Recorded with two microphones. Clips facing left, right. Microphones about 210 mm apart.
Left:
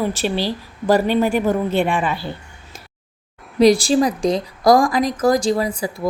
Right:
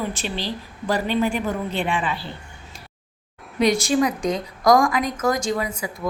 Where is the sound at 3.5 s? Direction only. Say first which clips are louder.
Left 6 dB; 35° left (ahead or behind).